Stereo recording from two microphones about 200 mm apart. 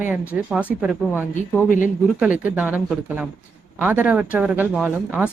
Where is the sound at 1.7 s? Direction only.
40° left (ahead or behind).